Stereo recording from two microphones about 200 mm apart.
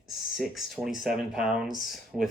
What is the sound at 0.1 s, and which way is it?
Speech, centre (ahead or behind).